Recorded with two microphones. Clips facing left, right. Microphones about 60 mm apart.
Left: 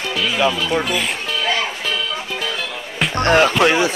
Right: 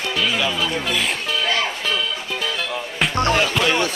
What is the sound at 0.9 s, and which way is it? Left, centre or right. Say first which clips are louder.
Music: left 1 dB; centre.